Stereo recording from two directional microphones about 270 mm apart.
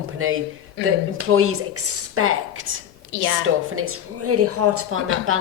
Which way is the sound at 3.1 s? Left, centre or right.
Left.